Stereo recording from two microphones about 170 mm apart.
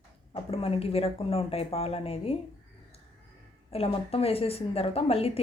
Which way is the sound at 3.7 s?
35° left (ahead or behind).